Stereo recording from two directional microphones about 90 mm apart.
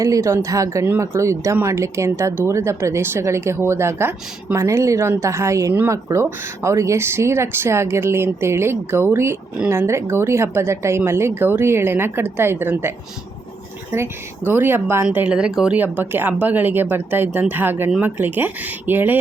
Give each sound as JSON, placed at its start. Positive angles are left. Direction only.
{"t": 0.0, "sound": "speech", "side_deg": -35}
{"t": 13.9, "sound": "speech", "side_deg": -25}
{"t": 15.1, "sound": "speech", "side_deg": -15}
{"t": 15.8, "sound": "speech", "side_deg": -20}